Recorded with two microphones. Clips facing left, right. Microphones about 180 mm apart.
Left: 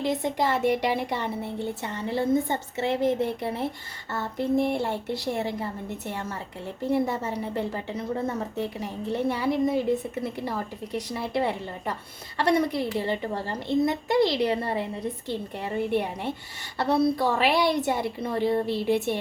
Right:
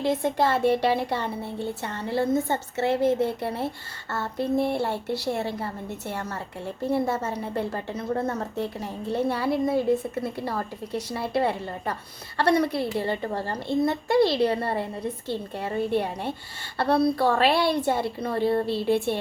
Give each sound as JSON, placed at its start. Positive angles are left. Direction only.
{"t": 0.2, "sound": "a woman's voice", "side_deg": 15}